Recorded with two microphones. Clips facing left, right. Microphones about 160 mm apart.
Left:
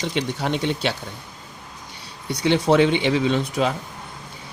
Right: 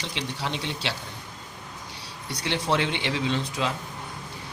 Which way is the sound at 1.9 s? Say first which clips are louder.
Left 8 dB; 55° left (ahead or behind).